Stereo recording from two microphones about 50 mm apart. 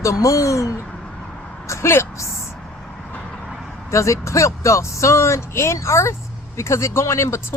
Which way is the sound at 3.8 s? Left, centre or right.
Left.